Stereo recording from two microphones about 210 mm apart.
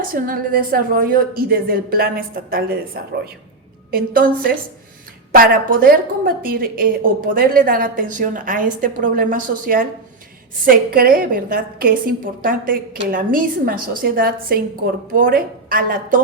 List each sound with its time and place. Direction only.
0.1 s a woman's voice: 45° right (ahead or behind)